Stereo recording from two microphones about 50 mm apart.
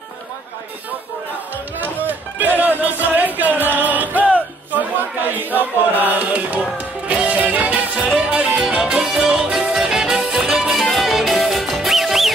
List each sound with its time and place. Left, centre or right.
2.0 s music: right
7.9 s music: centre